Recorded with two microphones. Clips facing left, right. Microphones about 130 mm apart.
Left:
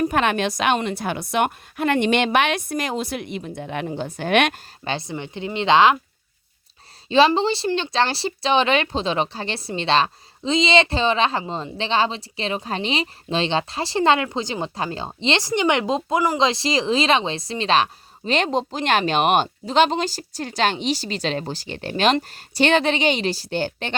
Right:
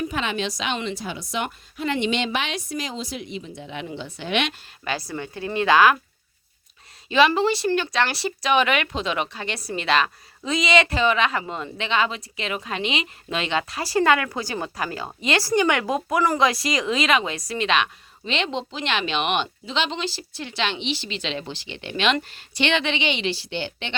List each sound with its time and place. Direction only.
0.1 s a woman's voice: 55° left (ahead or behind)
4.8 s a woman's voice: 25° left (ahead or behind)
7.1 s a woman's voice: 30° left (ahead or behind)